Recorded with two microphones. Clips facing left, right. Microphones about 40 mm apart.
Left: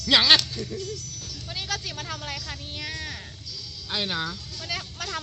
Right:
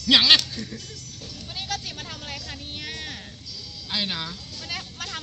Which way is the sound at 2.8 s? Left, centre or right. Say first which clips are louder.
Left 2 dB; right.